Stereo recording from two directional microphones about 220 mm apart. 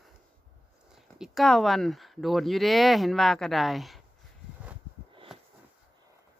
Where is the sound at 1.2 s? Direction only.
Centre (ahead or behind).